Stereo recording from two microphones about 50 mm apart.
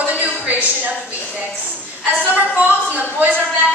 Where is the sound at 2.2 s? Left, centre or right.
Right.